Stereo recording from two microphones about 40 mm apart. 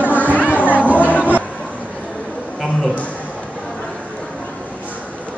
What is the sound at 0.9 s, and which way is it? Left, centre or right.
Music, left.